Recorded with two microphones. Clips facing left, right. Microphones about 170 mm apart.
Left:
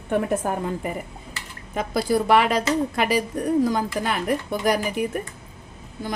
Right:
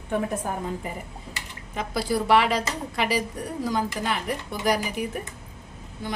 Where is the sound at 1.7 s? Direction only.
50° left (ahead or behind).